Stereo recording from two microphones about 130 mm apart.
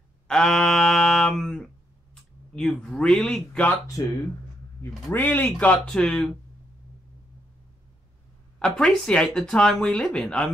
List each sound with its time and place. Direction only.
0.3 s a sound: 5° left (ahead or behind)
2.5 s speech: 5° left (ahead or behind)
4.0 s speech: 30° left (ahead or behind)
5.1 s speech: 15° left (ahead or behind)
8.5 s speech: 5° left (ahead or behind)